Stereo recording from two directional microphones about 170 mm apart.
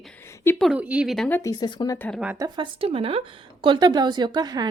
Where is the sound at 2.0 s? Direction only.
10° left (ahead or behind).